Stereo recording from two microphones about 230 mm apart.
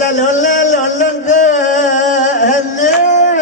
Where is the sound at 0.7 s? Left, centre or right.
Left.